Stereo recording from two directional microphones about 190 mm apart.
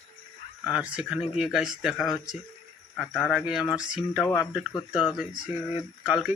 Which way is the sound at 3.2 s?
Centre (ahead or behind).